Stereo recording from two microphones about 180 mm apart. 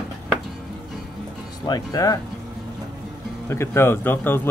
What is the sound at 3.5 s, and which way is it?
Speech, 15° left (ahead or behind).